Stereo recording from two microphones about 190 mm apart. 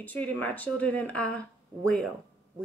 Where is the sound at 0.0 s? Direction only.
10° left (ahead or behind).